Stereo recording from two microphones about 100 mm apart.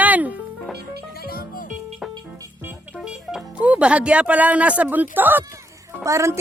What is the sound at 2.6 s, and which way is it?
Music, 20° right (ahead or behind).